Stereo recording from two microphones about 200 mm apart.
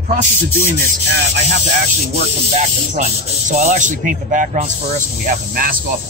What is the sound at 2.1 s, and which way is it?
Speech, 35° right (ahead or behind).